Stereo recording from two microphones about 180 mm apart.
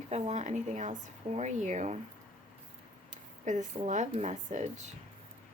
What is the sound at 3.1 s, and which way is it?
Speech, 40° right (ahead or behind).